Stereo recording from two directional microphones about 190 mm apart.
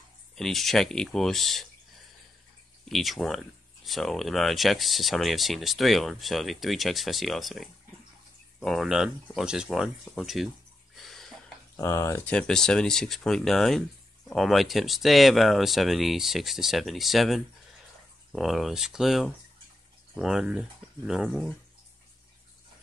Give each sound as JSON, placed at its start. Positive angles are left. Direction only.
{"t": 0.4, "sound": "speech", "side_deg": 0}
{"t": 2.8, "sound": "speech", "side_deg": 0}
{"t": 11.0, "sound": "a sound", "side_deg": 0}
{"t": 11.7, "sound": "speech", "side_deg": 15}